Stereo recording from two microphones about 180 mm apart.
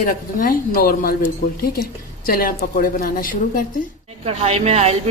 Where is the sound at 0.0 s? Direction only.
50° left (ahead or behind).